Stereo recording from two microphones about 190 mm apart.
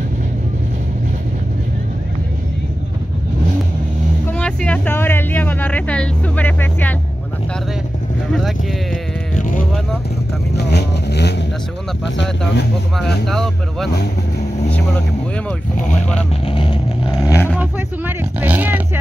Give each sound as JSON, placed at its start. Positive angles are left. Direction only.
{"t": 4.3, "sound": "a sound", "side_deg": 5}
{"t": 8.3, "sound": "sheep", "side_deg": 0}
{"t": 10.5, "sound": "vehicle", "side_deg": 60}
{"t": 12.9, "sound": "speech", "side_deg": 0}
{"t": 16.4, "sound": "vehicle", "side_deg": 25}
{"t": 17.2, "sound": "a sound", "side_deg": 15}
{"t": 17.6, "sound": "vehicle", "side_deg": -10}